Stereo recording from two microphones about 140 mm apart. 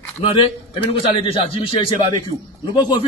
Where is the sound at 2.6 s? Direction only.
35° left (ahead or behind).